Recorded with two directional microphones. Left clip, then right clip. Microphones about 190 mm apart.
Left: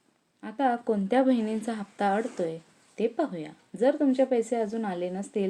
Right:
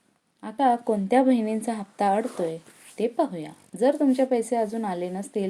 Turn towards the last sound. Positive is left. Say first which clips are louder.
# right 2 dB
turn(degrees=-25)  # may be behind; listen again after turning